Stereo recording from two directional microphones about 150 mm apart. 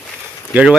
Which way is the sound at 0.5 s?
5° right (ahead or behind).